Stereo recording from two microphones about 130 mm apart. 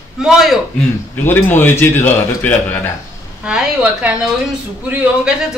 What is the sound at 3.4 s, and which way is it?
A woman's voice, 10° right (ahead or behind).